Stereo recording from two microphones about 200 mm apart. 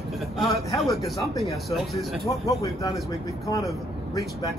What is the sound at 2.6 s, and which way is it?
Speech, 20° left (ahead or behind).